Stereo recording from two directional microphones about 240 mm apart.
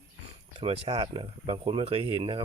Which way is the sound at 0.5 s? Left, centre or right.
Right.